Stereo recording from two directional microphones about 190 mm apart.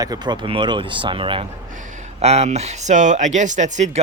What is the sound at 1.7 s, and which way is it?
Speech, 40° right (ahead or behind).